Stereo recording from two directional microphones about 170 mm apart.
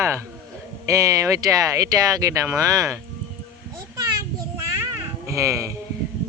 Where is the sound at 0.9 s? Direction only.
20° right (ahead or behind).